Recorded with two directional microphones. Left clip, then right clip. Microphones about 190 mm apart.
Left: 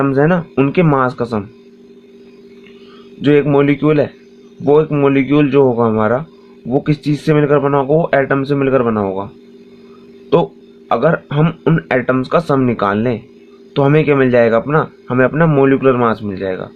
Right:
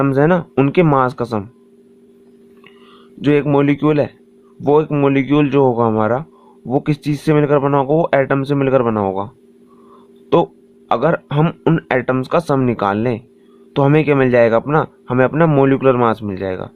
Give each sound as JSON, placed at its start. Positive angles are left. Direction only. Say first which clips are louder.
{"t": 0.0, "sound": "speech", "louder": "left 1 dB", "side_deg": -45}
{"t": 3.2, "sound": "a man's voice", "louder": "left 3 dB", "side_deg": -40}
{"t": 10.3, "sound": "a man's voice", "louder": "left 1 dB", "side_deg": -45}